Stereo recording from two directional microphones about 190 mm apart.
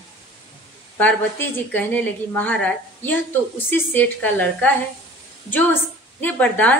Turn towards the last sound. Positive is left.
turn(degrees=10)  # may be behind; listen again after turning